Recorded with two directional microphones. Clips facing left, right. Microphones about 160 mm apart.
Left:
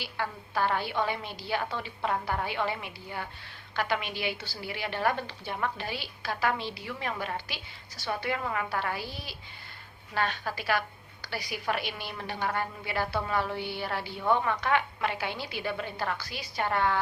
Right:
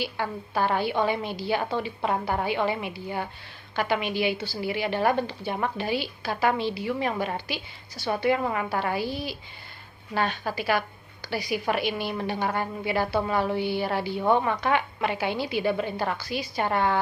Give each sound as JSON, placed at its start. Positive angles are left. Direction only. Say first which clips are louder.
{"t": 0.0, "sound": "a woman's voice", "louder": "right 5 dB", "side_deg": -15}